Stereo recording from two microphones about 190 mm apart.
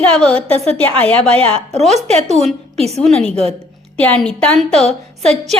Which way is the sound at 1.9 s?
35° right (ahead or behind).